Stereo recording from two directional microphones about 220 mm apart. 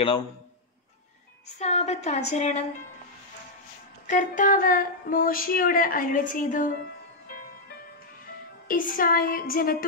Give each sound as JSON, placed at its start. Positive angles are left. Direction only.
{"t": 1.6, "sound": "speech", "side_deg": 30}
{"t": 4.1, "sound": "speech", "side_deg": 35}
{"t": 8.6, "sound": "speech", "side_deg": 40}